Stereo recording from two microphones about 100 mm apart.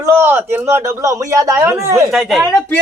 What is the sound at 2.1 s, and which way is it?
Speech, centre (ahead or behind).